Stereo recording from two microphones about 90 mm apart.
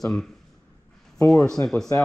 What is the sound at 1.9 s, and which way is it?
Speech, 30° left (ahead or behind).